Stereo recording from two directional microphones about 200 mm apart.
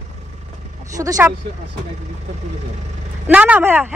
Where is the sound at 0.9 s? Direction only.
15° right (ahead or behind).